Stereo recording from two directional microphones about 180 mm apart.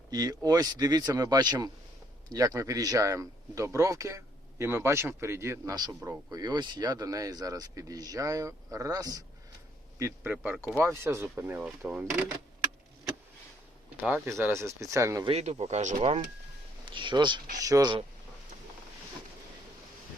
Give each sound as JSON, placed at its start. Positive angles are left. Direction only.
{"t": 0.1, "sound": "speech", "side_deg": -20}
{"t": 13.9, "sound": "speech", "side_deg": -10}
{"t": 15.3, "sound": "speech", "side_deg": -35}
{"t": 16.9, "sound": "speech", "side_deg": -25}